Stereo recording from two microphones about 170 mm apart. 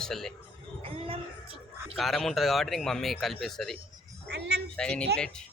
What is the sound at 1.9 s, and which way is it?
Speech, centre (ahead or behind).